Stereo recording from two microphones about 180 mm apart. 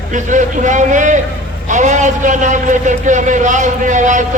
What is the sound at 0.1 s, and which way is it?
A man's voice, 45° right (ahead or behind).